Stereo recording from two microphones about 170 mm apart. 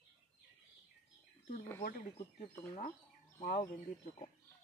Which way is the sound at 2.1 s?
35° left (ahead or behind).